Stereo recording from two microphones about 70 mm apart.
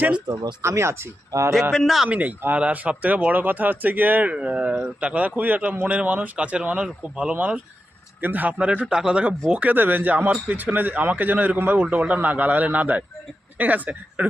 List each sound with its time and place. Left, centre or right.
0.6 s speech: right
1.3 s a man's voice: right
1.7 s a man's voice: centre
2.0 s speech: right